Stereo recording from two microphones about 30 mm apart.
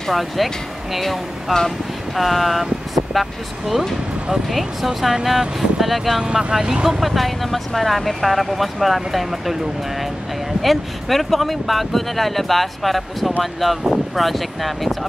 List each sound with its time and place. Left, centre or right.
0.1 s speech: centre
1.0 s speech: centre
2.1 s speech: centre
6.2 s speech: right
6.9 s speech: centre
10.6 s speech: centre